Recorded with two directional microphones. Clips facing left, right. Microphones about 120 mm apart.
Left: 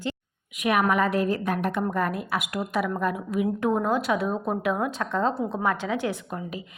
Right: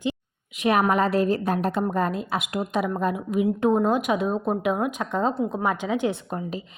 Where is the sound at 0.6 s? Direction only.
30° right (ahead or behind).